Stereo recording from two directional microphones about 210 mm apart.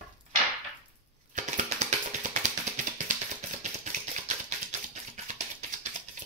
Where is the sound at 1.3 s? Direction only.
35° right (ahead or behind).